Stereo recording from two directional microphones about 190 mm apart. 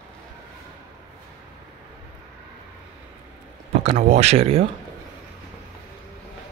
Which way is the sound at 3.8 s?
35° right (ahead or behind).